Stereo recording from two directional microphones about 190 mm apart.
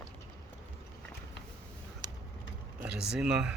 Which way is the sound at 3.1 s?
5° right (ahead or behind).